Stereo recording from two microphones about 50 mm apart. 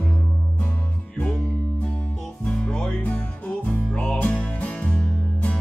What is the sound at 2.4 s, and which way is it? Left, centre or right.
Music, centre.